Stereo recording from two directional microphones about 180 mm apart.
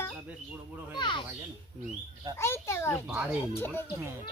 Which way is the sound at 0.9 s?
25° left (ahead or behind).